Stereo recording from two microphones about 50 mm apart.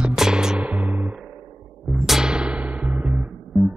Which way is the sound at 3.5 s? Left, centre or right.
Centre.